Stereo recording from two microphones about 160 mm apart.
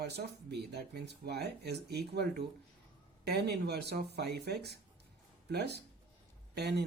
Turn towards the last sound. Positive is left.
turn(degrees=-90)